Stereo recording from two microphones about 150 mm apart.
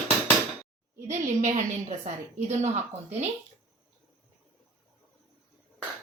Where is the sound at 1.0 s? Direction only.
55° right (ahead or behind).